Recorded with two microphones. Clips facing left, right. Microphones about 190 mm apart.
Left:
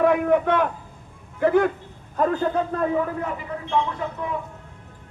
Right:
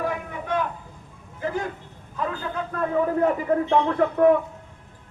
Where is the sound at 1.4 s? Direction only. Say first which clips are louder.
Left 9 dB; 60° left (ahead or behind).